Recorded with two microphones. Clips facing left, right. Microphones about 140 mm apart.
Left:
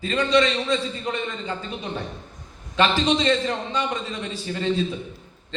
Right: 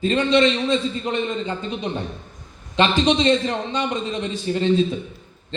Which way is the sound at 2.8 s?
20° right (ahead or behind).